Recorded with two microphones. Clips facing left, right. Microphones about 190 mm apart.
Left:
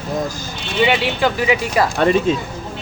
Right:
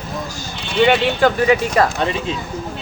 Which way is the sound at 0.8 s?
5° left (ahead or behind).